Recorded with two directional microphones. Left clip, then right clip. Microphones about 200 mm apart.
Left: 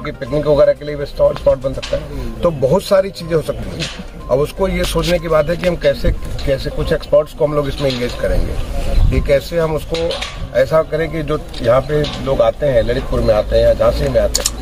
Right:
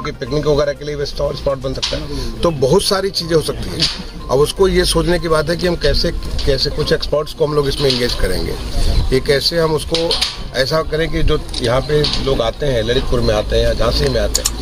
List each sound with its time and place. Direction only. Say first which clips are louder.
0.0 s speech: even; 15° right (ahead or behind)
9.1 s speech: right 1 dB; 15° right (ahead or behind)